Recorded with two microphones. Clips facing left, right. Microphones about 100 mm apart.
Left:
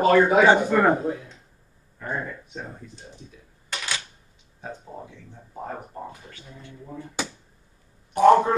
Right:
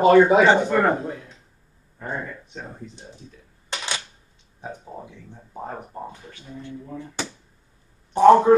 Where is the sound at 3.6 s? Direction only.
25° right (ahead or behind).